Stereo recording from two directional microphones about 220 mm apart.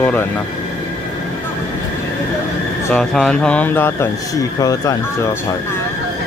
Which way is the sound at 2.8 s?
5° left (ahead or behind).